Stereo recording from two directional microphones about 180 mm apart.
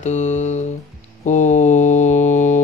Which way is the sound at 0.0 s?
40° left (ahead or behind).